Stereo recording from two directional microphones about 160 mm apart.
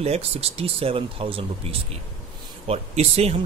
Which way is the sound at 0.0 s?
40° right (ahead or behind).